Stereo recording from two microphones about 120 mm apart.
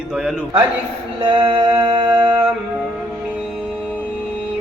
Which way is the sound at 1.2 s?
45° right (ahead or behind).